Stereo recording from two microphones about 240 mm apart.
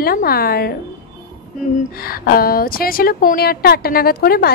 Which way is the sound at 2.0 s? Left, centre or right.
Left.